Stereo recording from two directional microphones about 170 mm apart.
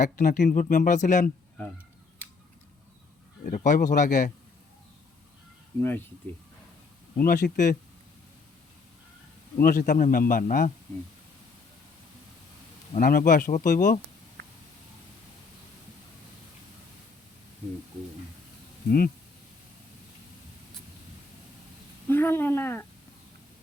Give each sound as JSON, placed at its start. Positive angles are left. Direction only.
{"t": 0.0, "sound": "speech", "side_deg": 50}
{"t": 3.4, "sound": "speech", "side_deg": 50}
{"t": 7.2, "sound": "speech", "side_deg": 55}
{"t": 9.6, "sound": "a man's voice", "side_deg": 55}
{"t": 13.0, "sound": "speech", "side_deg": 55}
{"t": 18.9, "sound": "a man's voice", "side_deg": 60}
{"t": 22.0, "sound": "speech", "side_deg": 15}